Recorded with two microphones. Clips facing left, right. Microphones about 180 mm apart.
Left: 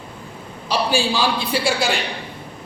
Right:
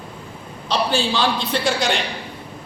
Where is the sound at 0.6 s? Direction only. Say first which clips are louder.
Left 1 dB; 10° left (ahead or behind).